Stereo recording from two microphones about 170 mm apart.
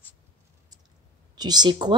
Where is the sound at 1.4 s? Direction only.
25° right (ahead or behind).